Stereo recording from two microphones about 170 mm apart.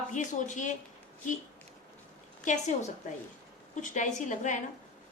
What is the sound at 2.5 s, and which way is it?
Speech, 40° left (ahead or behind).